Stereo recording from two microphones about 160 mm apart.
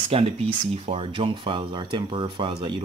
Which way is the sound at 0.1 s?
40° right (ahead or behind).